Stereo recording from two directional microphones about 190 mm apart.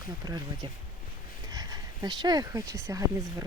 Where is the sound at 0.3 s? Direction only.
20° right (ahead or behind).